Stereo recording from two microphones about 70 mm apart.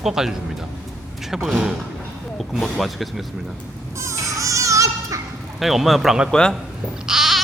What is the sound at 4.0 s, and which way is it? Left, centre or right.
Baby cry, right.